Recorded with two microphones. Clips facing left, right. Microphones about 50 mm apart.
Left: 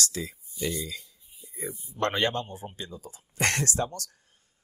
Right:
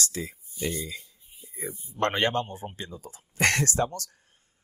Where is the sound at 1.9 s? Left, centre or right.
Right.